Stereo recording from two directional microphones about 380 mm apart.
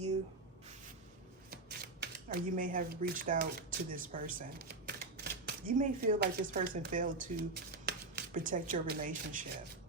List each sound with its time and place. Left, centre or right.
2.0 s speech: right